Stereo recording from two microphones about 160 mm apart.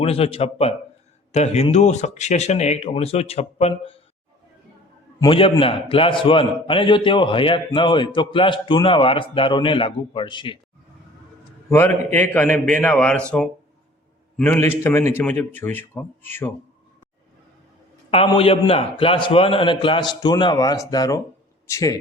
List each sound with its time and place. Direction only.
0.0 s a man's voice: 35° left (ahead or behind)
5.2 s a man's voice: 35° left (ahead or behind)
11.7 s a man's voice: 15° left (ahead or behind)
14.3 s a man's voice: 10° left (ahead or behind)
18.3 s a man's voice: 35° left (ahead or behind)